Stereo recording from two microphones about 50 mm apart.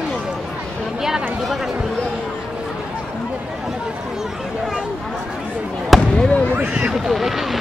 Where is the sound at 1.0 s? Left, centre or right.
Centre.